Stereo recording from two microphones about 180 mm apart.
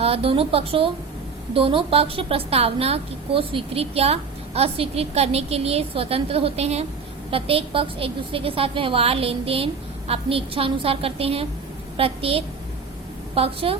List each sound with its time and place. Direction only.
0.0 s a woman's voice: 30° right (ahead or behind)